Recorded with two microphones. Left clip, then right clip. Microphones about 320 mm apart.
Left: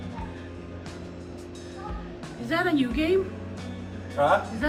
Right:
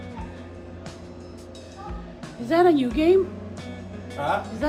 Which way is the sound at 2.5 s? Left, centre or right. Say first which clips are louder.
Right 6 dB; centre.